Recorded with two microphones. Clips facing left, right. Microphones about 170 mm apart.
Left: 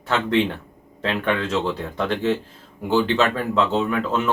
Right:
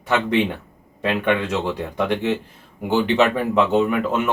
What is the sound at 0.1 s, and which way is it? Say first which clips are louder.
Speech: right 1 dB; 15° right (ahead or behind).